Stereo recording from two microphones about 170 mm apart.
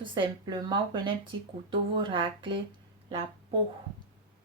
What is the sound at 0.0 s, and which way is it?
Speech, 30° right (ahead or behind).